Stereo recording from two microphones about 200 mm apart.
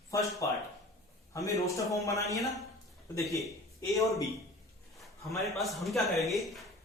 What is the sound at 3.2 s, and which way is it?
Speech, centre (ahead or behind).